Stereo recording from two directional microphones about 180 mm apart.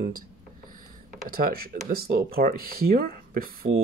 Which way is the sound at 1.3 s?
55° right (ahead or behind).